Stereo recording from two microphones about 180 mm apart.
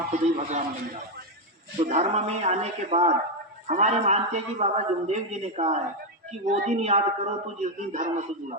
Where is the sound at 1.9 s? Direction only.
40° right (ahead or behind).